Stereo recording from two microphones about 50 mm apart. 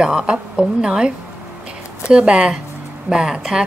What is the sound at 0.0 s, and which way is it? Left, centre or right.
Speech, centre.